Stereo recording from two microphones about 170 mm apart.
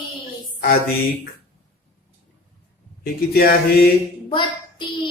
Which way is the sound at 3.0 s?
65° left (ahead or behind).